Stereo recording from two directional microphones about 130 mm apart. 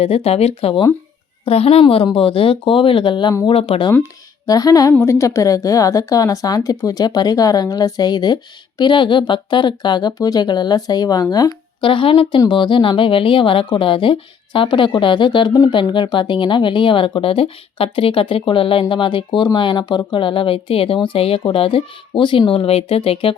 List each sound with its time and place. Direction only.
0.0 s a woman's voice: 50° left (ahead or behind)
3.4 s speech: 45° left (ahead or behind)
4.4 s a woman's voice: 30° left (ahead or behind)
11.9 s a woman's voice: 40° left (ahead or behind)